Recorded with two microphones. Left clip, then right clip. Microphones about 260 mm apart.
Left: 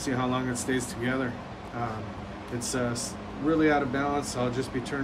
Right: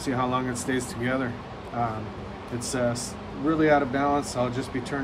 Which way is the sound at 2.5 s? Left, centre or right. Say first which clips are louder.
Right 3 dB; right.